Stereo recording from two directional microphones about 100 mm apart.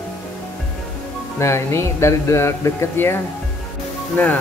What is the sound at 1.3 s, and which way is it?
Speech, 30° left (ahead or behind).